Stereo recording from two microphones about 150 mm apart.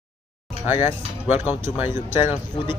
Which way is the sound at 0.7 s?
15° right (ahead or behind).